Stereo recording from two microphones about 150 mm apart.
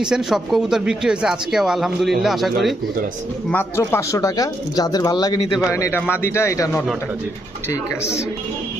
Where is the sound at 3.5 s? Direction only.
15° left (ahead or behind).